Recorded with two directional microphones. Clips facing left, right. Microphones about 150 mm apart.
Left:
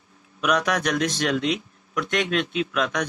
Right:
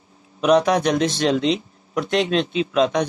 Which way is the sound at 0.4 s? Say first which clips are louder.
Right 7 dB; 30° right (ahead or behind).